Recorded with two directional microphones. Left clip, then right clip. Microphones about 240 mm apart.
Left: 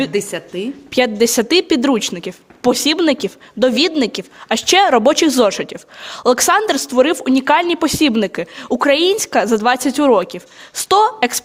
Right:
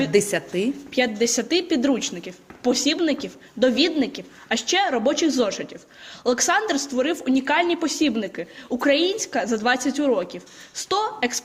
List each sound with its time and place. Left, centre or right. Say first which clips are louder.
0.1 s a woman's voice: even; centre
0.9 s a woman's voice: left 8 dB; left